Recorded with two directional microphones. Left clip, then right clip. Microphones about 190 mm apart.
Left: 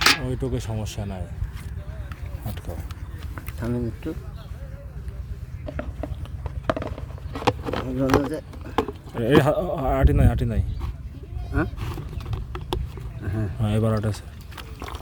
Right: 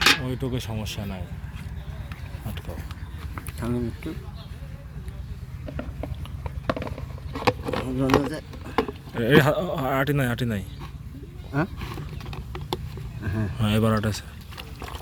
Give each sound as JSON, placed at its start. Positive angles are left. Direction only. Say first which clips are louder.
{"t": 0.3, "sound": "speech", "louder": "left 1 dB", "side_deg": 25}
{"t": 3.3, "sound": "speech", "louder": "even", "side_deg": 30}
{"t": 5.7, "sound": "a sound", "louder": "left 2 dB", "side_deg": 5}
{"t": 8.7, "sound": "speech", "louder": "even", "side_deg": 5}
{"t": 9.1, "sound": "speech", "louder": "even", "side_deg": 15}
{"t": 11.8, "sound": "wild animals", "louder": "even", "side_deg": 5}
{"t": 13.2, "sound": "a sound", "louder": "even", "side_deg": -5}
{"t": 13.6, "sound": "speech", "louder": "right 2 dB", "side_deg": 10}